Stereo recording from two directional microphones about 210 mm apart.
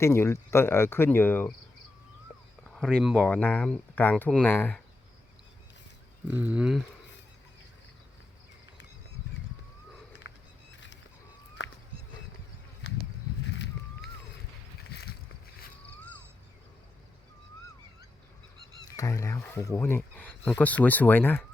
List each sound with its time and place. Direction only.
0.0 s speech: 10° left (ahead or behind)
2.6 s speech: 5° left (ahead or behind)
6.2 s speech: 5° right (ahead or behind)
13.5 s a sound: 55° left (ahead or behind)
18.9 s speech: 15° left (ahead or behind)